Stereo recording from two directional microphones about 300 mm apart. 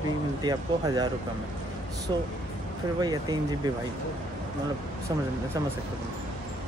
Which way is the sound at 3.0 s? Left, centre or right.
Centre.